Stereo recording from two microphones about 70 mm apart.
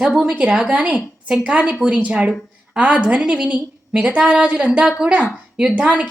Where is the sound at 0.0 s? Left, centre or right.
Centre.